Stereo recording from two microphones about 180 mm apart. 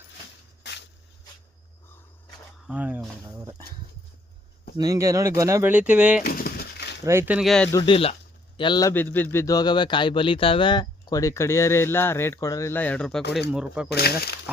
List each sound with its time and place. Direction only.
0.7 s a sound: 70° left (ahead or behind)
2.6 s speech: 5° right (ahead or behind)
3.2 s speech: 20° right (ahead or behind)
4.8 s speech: 15° right (ahead or behind)
6.2 s a sound: 55° left (ahead or behind)
7.0 s speech: 15° right (ahead or behind); by 7.7 s centre (ahead or behind)
7.7 s a man's voice: 25° left (ahead or behind)
8.9 s speech: 10° left (ahead or behind)
13.9 s speech: 60° left (ahead or behind)